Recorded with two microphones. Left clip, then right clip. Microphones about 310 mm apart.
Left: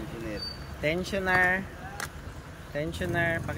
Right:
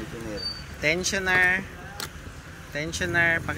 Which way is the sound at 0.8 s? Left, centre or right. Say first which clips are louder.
Right 4 dB; centre.